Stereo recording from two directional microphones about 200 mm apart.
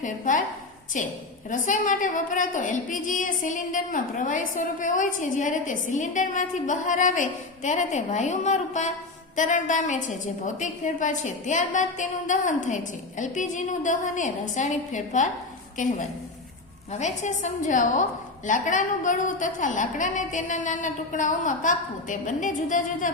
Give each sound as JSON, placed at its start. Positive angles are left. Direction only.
{"t": 0.0, "sound": "a woman's voice", "side_deg": 40}
{"t": 16.9, "sound": "a woman's voice", "side_deg": 35}